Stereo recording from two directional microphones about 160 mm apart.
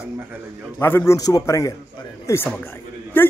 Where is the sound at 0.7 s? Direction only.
15° left (ahead or behind).